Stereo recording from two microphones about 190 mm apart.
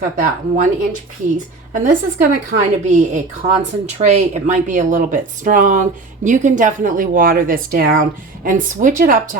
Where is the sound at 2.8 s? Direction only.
40° right (ahead or behind).